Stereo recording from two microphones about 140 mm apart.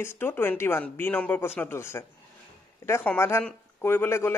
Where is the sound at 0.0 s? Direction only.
15° left (ahead or behind).